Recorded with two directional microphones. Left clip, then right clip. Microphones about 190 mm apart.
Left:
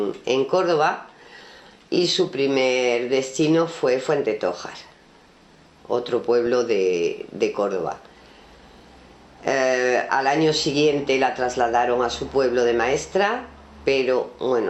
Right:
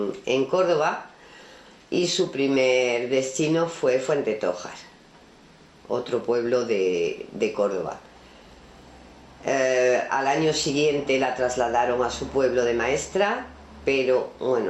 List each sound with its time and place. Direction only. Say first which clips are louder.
0.3 s speech: left 1 dB; 45° left (ahead or behind)
5.9 s speech: left 4 dB; 50° left (ahead or behind)
9.4 s speech: left 1 dB; 45° left (ahead or behind)